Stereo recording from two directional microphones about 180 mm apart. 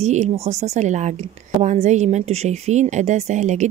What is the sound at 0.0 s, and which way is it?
A woman's voice, 40° right (ahead or behind).